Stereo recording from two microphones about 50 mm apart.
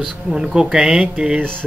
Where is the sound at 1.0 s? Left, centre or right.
Centre.